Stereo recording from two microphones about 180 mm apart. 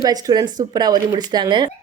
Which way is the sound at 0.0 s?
20° right (ahead or behind).